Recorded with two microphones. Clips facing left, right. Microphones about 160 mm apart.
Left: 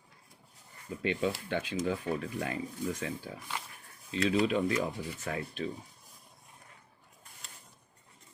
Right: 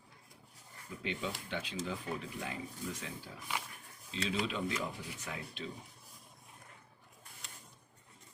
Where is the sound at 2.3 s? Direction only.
60° left (ahead or behind).